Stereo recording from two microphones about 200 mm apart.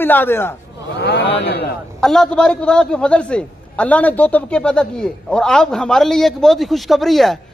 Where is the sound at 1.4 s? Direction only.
55° left (ahead or behind).